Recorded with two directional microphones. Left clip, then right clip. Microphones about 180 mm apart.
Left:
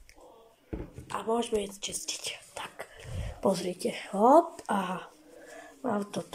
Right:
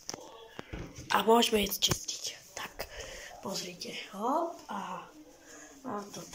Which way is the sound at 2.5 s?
Centre (ahead or behind).